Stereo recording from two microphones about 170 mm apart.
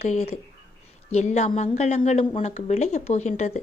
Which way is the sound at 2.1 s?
40° left (ahead or behind).